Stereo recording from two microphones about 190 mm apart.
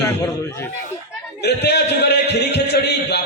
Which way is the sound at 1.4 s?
60° left (ahead or behind).